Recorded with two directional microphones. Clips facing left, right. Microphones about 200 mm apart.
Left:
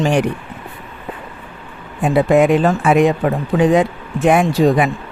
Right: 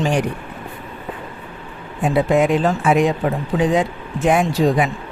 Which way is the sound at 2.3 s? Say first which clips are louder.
Left 5 dB; 60° left (ahead or behind).